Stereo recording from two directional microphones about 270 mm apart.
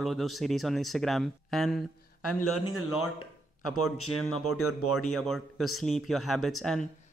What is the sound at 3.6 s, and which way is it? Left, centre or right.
Speech, left.